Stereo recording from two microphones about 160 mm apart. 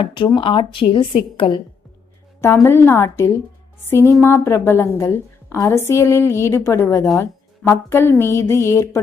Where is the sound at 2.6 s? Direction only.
15° left (ahead or behind).